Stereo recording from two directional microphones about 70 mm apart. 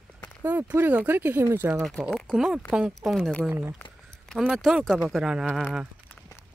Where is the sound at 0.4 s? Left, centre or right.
Right.